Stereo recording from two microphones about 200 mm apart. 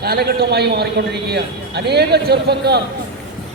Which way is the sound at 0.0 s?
50° right (ahead or behind).